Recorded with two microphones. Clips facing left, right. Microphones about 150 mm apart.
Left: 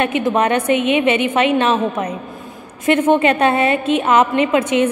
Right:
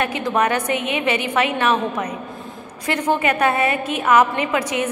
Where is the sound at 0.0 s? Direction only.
20° left (ahead or behind).